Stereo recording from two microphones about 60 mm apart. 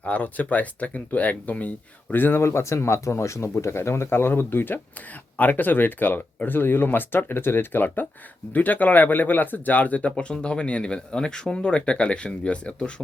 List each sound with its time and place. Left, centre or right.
0.0 s speech: left
2.4 s speech: left; by 12.9 s centre